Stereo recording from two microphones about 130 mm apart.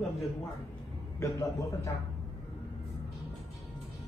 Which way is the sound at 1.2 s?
25° left (ahead or behind).